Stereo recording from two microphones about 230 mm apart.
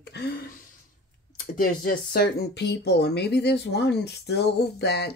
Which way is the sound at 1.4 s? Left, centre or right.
Left.